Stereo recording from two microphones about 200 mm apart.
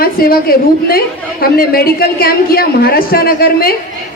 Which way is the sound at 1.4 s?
50° left (ahead or behind).